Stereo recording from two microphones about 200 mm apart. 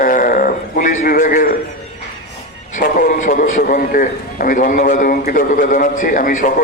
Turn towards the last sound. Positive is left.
turn(degrees=45)  # may be behind; listen again after turning